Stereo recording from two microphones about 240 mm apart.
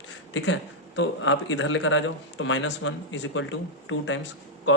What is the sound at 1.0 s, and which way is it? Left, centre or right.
Speech, left.